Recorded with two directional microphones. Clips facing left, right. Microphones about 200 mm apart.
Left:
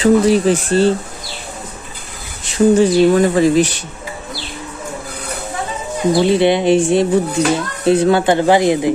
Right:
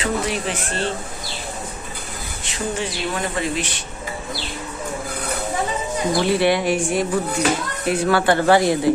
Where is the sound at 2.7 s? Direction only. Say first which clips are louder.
Left 16 dB; 40° left (ahead or behind).